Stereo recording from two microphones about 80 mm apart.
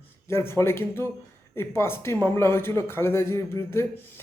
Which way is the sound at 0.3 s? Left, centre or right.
Left.